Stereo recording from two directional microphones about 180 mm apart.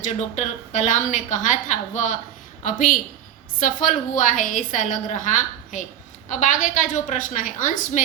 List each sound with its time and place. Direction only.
0.0 s a woman's voice: 40° left (ahead or behind)